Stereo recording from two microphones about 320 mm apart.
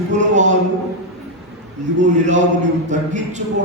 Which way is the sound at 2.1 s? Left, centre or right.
Right.